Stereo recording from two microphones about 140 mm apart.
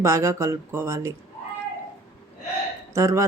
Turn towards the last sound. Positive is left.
turn(degrees=-20)  # may be behind; listen again after turning